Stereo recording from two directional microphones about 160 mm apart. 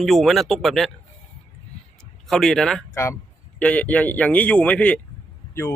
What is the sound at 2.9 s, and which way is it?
Speech, 15° left (ahead or behind).